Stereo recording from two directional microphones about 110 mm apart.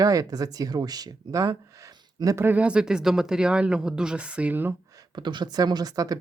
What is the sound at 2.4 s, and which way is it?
Speech, 10° right (ahead or behind).